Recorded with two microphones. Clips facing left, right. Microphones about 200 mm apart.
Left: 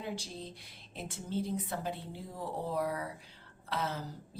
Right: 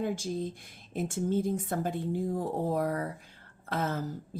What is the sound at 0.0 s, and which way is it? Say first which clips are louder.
A woman's voice: right 9 dB; 50° right (ahead or behind).